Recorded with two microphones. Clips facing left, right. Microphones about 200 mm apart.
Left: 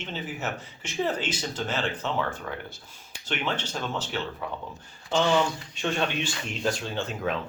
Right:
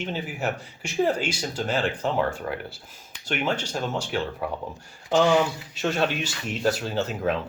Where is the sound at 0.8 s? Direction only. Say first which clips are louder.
Right 5 dB; 10° right (ahead or behind).